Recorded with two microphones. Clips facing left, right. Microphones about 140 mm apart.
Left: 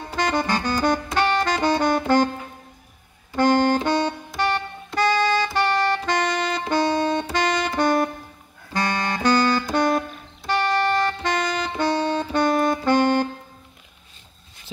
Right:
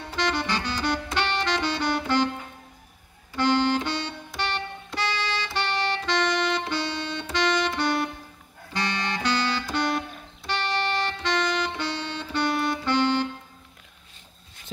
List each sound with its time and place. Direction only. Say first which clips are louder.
0.0 s music: left 4 dB; 45° left (ahead or behind)
3.3 s music: left 4 dB; 45° left (ahead or behind)